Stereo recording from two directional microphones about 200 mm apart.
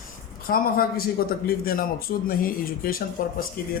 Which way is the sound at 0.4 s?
45° left (ahead or behind).